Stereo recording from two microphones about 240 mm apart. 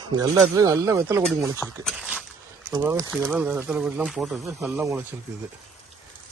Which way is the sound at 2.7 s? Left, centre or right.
Centre.